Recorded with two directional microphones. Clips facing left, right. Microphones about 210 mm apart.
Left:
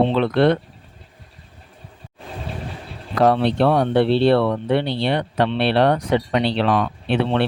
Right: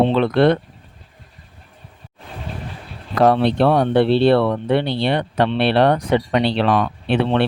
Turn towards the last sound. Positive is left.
turn(degrees=-55)  # may be behind; listen again after turning